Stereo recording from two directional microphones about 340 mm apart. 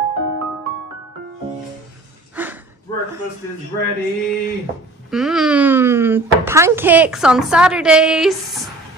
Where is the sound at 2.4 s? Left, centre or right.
Centre.